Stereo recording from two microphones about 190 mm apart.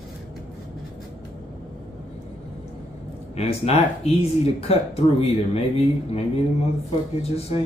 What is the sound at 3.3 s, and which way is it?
Speech, 35° left (ahead or behind).